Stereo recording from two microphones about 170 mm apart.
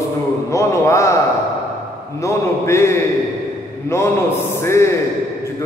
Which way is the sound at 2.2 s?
15° left (ahead or behind).